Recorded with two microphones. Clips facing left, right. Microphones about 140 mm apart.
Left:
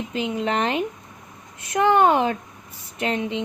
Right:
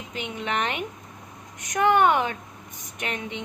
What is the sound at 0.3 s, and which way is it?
A woman's voice, 35° left (ahead or behind).